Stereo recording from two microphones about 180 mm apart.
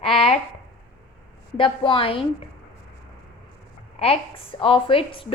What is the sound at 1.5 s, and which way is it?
Speech, 30° left (ahead or behind).